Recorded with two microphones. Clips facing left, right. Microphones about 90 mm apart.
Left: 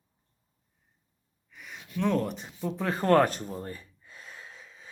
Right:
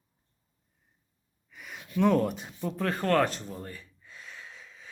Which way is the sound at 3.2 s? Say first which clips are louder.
Left 2 dB; 50° left (ahead or behind).